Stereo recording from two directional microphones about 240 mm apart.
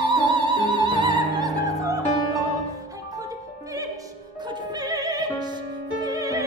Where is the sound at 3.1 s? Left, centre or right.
Centre.